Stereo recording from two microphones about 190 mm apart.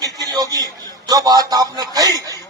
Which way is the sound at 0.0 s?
20° right (ahead or behind).